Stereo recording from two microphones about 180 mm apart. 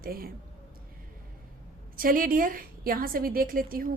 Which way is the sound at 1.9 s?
50° right (ahead or behind).